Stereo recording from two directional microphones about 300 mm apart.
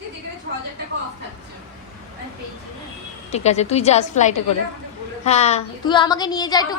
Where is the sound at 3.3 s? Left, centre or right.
Left.